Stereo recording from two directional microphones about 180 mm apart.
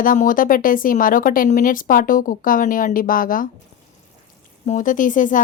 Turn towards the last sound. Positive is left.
turn(degrees=45)  # may be behind; listen again after turning